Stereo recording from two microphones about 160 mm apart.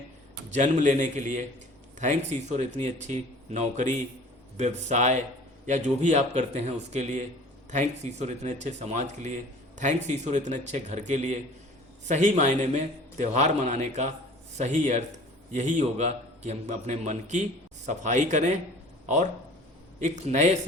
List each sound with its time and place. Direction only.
0.5 s a man's voice: 50° right (ahead or behind)